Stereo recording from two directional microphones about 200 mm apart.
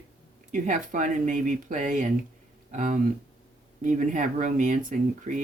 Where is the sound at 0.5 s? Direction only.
40° right (ahead or behind).